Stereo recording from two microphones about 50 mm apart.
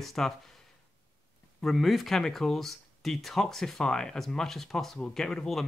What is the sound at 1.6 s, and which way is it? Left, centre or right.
Speech, centre.